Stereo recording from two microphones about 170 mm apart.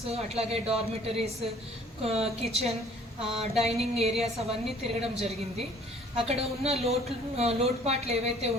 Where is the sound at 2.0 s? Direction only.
35° right (ahead or behind).